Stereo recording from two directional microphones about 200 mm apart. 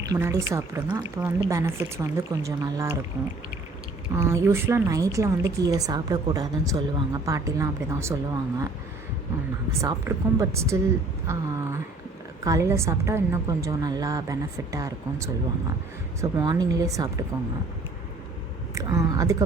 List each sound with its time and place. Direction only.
0.1 s speech: 15° right (ahead or behind)
4.1 s speech: 15° right (ahead or behind)
9.8 s speech: 15° right (ahead or behind)
12.5 s speech: 15° right (ahead or behind)
18.7 s speech: 15° right (ahead or behind)